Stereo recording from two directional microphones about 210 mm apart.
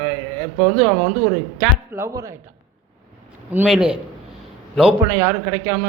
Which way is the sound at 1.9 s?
15° right (ahead or behind).